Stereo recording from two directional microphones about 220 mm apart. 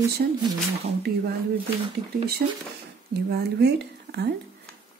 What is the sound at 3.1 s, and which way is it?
Speech, 45° right (ahead or behind).